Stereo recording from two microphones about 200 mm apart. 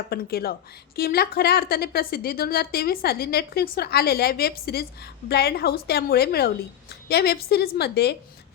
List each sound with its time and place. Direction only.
0.1 s a woman's voice: 50° left (ahead or behind)